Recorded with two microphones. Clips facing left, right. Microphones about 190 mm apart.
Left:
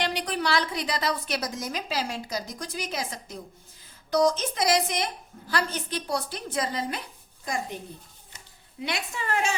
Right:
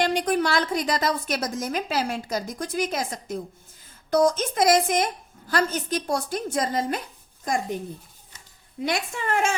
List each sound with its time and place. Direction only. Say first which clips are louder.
0.0 s a woman's voice: right 6 dB; 45° right (ahead or behind)
8.8 s a woman's voice: right 5 dB; 45° right (ahead or behind)